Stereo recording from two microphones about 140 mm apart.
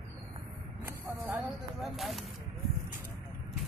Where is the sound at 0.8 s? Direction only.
15° right (ahead or behind).